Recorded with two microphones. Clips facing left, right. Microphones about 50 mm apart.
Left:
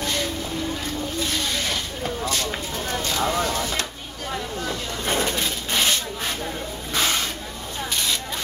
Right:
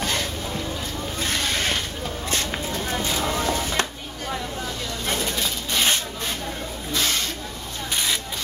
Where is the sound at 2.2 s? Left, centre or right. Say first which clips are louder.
Even; right.